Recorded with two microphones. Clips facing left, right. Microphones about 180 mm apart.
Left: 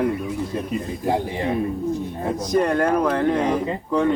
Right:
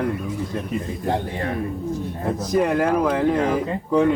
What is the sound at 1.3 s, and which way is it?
Speech, 20° left (ahead or behind).